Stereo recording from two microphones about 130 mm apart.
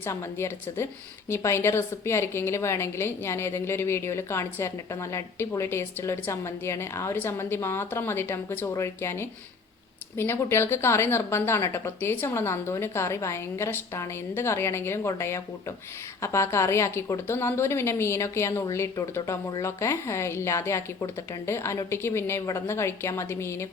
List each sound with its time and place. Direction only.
0.0 s a woman's voice: 20° left (ahead or behind)